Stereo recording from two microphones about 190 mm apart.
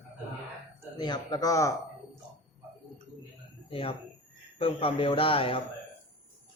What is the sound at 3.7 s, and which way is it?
A man's voice, 30° left (ahead or behind).